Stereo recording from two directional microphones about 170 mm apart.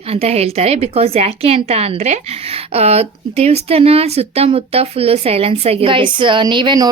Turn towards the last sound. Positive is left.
turn(degrees=-25)  # may be behind; listen again after turning